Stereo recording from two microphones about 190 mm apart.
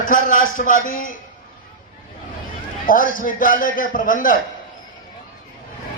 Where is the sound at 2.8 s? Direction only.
45° left (ahead or behind).